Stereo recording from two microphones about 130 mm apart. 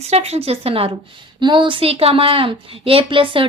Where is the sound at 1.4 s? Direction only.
35° right (ahead or behind).